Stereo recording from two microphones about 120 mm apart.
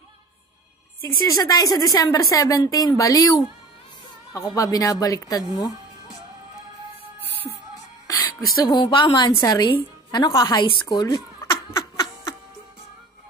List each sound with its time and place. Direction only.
1.0 s a woman's voice: 30° left (ahead or behind)
8.1 s music: 30° left (ahead or behind)
8.8 s a woman's voice: 40° left (ahead or behind)
11.8 s laughter: 30° left (ahead or behind)